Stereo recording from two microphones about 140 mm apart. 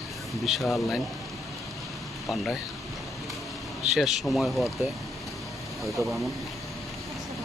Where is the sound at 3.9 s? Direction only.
Centre (ahead or behind).